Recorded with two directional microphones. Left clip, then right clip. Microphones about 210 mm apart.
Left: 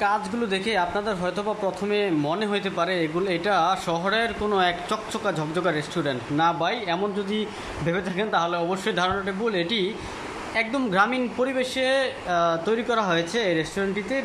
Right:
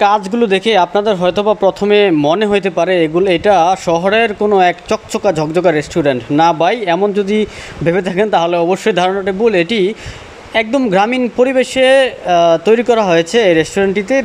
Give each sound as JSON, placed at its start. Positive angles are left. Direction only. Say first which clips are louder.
{"t": 0.0, "sound": "speech", "louder": "right 13 dB", "side_deg": -40}